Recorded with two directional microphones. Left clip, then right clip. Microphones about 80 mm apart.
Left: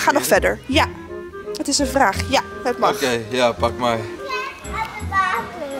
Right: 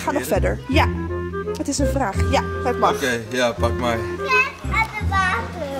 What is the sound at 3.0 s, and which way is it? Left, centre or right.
Speech, left.